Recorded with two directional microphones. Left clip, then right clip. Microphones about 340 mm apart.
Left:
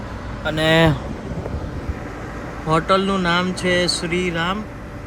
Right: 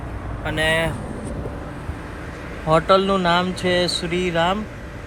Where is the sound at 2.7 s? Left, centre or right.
Centre.